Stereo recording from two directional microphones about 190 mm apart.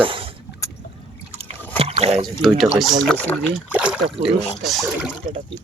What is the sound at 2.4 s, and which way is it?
Speech, centre (ahead or behind).